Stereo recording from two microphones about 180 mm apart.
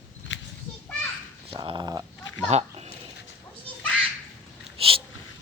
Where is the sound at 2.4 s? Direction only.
35° right (ahead or behind).